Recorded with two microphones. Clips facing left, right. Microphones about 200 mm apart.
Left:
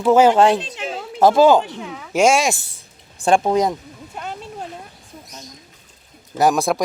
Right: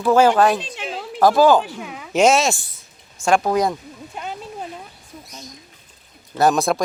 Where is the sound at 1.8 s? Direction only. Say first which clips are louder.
Left 1 dB; 15° right (ahead or behind).